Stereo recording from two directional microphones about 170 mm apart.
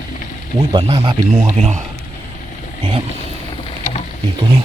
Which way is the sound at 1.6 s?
40° right (ahead or behind).